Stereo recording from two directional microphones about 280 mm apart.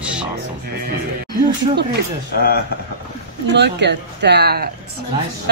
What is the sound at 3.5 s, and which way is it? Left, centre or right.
A woman's voice, right.